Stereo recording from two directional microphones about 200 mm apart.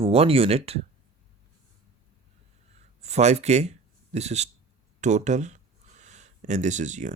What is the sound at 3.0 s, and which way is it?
Speech, 35° right (ahead or behind).